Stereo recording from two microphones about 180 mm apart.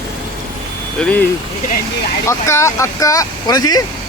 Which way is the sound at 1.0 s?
10° left (ahead or behind).